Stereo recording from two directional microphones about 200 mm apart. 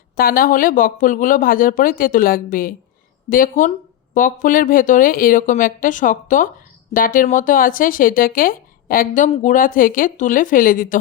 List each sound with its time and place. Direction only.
0.2 s speech: 45° left (ahead or behind)